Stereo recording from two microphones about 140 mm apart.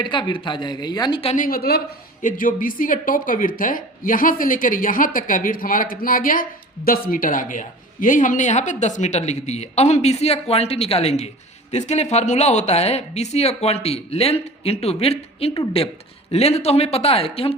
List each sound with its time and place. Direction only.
0.0 s speech: 35° left (ahead or behind)
1.4 s a woman's voice: 90° left
2.2 s a woman's voice: 80° left; by 17.5 s 45° left (ahead or behind)